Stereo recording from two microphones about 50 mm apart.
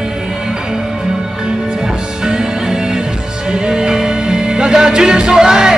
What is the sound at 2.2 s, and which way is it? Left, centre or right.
Music, centre.